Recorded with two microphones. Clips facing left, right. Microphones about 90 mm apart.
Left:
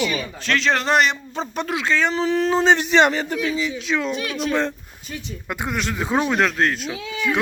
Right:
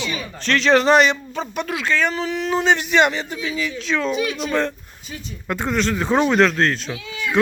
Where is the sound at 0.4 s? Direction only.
Centre (ahead or behind).